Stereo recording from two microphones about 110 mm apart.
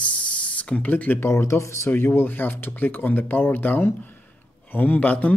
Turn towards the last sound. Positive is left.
turn(degrees=15)  # may be behind; listen again after turning